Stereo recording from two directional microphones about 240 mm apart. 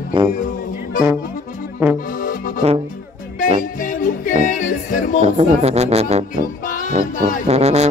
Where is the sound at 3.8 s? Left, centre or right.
Left.